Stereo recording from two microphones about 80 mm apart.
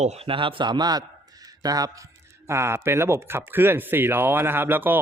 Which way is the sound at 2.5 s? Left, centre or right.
Right.